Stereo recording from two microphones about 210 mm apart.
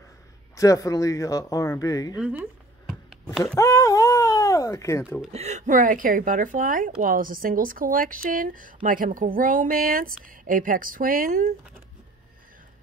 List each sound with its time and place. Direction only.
0.6 s speech: 15° left (ahead or behind)
2.1 s speech: 5° right (ahead or behind)
3.5 s a sound: 15° left (ahead or behind)
5.3 s speech: 30° right (ahead or behind)